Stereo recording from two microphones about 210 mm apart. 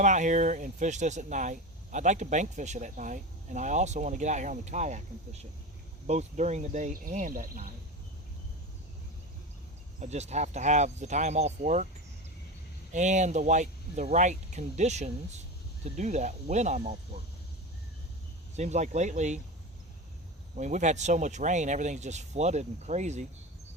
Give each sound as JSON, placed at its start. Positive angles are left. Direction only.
{"t": 0.0, "sound": "speech", "side_deg": -35}
{"t": 10.0, "sound": "speech", "side_deg": -30}
{"t": 12.9, "sound": "speech", "side_deg": -35}
{"t": 18.5, "sound": "speech", "side_deg": -35}
{"t": 20.6, "sound": "speech", "side_deg": -35}